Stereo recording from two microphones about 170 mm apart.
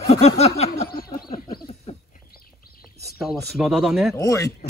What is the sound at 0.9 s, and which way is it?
Snicker, 65° left (ahead or behind).